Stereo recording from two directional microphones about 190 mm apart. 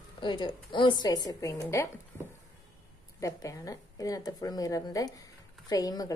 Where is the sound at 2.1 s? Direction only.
10° left (ahead or behind).